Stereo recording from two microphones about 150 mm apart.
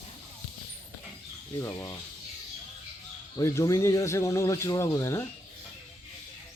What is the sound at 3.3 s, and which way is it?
A man's voice, 20° left (ahead or behind).